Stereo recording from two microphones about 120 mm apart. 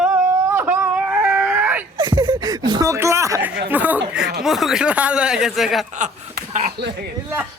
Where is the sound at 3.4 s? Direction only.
15° right (ahead or behind).